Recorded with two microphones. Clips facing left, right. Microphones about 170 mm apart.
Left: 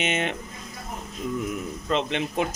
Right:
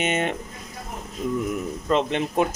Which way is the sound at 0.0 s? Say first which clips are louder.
Right 3 dB; 45° right (ahead or behind).